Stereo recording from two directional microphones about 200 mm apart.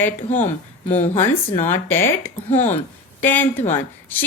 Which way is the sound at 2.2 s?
35° left (ahead or behind).